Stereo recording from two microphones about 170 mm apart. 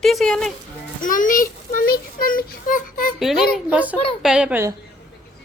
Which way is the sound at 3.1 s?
Centre (ahead or behind).